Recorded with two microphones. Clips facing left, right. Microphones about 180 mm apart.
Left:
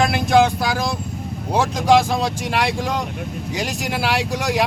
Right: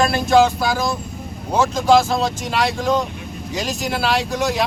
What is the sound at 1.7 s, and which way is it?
Speech, 15° left (ahead or behind).